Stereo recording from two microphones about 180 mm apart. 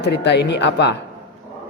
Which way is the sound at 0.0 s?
70° left (ahead or behind).